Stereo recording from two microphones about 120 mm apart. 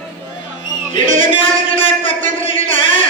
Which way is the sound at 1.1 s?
50° left (ahead or behind).